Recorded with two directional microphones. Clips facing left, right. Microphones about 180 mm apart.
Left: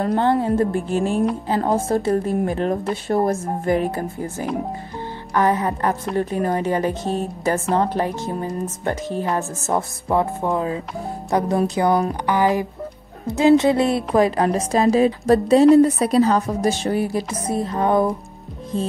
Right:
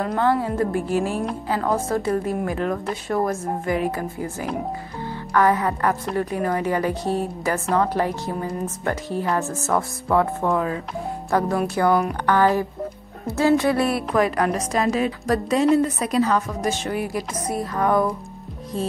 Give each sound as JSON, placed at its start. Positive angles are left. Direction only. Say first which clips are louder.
{"t": 0.0, "sound": "a woman's voice", "louder": "left 2 dB", "side_deg": 25}
{"t": 5.3, "sound": "a woman's voice", "louder": "even", "side_deg": 20}